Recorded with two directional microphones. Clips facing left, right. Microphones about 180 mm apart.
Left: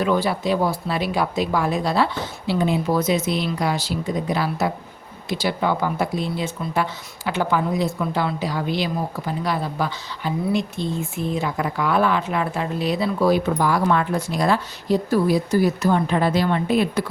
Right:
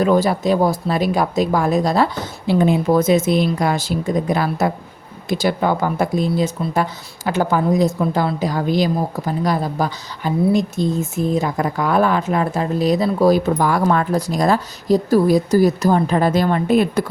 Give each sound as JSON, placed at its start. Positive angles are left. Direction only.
{"t": 0.0, "sound": "speech", "side_deg": -40}